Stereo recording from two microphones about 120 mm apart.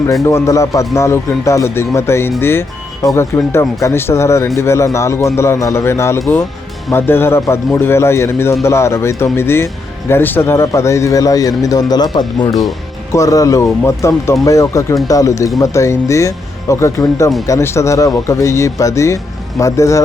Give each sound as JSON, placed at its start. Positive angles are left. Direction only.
{"t": 0.1, "sound": "speech", "side_deg": 25}